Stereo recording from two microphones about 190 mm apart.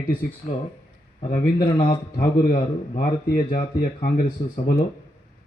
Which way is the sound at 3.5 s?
50° left (ahead or behind).